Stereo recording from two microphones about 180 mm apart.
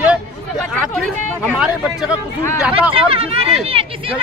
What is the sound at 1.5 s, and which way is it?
Speech, 5° right (ahead or behind).